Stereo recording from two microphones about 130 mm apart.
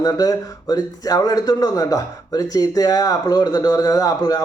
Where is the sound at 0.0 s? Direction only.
25° left (ahead or behind).